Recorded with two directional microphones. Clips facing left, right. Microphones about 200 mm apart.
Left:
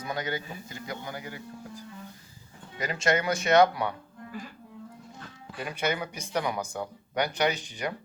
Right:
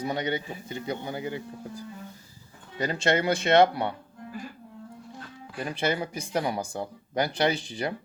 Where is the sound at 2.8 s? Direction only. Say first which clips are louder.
Right 2 dB; 30° right (ahead or behind).